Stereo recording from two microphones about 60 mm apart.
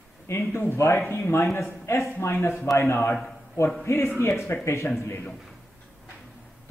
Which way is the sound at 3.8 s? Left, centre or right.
Left.